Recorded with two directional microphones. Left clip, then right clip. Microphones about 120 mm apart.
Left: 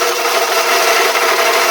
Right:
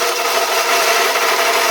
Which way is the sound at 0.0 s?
25° left (ahead or behind).